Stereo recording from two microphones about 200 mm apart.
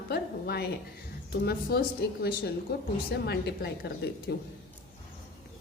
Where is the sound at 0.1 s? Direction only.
50° left (ahead or behind).